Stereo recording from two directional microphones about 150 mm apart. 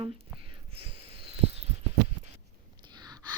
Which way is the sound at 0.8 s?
40° right (ahead or behind).